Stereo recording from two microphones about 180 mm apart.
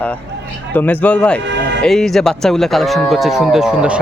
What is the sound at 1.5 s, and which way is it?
Music, 70° right (ahead or behind).